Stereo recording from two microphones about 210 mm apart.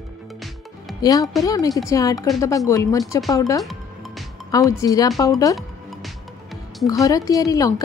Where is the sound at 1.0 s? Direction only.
15° left (ahead or behind).